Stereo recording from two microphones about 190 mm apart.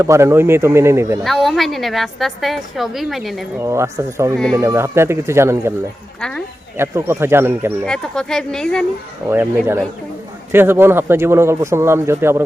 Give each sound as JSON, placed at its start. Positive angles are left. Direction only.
{"t": 0.0, "sound": "speech", "side_deg": -15}
{"t": 1.2, "sound": "a woman's voice", "side_deg": 0}
{"t": 3.6, "sound": "speech", "side_deg": -15}
{"t": 6.1, "sound": "speech", "side_deg": 5}
{"t": 6.7, "sound": "speech", "side_deg": -15}
{"t": 7.9, "sound": "a woman's voice", "side_deg": 5}
{"t": 9.3, "sound": "speech", "side_deg": -10}